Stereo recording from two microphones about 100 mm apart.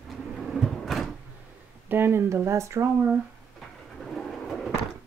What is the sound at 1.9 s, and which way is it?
Speech, 20° right (ahead or behind).